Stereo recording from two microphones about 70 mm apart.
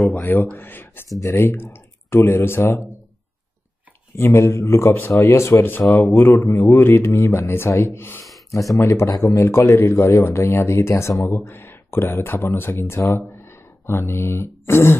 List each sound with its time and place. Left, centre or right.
0.1 s speech: left
4.2 s speech: left
6.4 s speech: left
6.7 s speech: left
7.4 s speech: left